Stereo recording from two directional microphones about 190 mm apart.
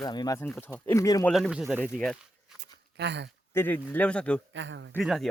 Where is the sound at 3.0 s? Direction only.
65° right (ahead or behind).